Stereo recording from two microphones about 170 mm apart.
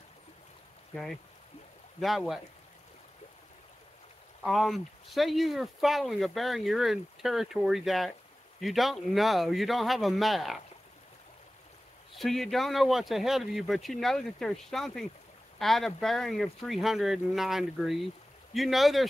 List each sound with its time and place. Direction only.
2.0 s speech: centre (ahead or behind)
4.4 s speech: centre (ahead or behind)
12.2 s speech: centre (ahead or behind)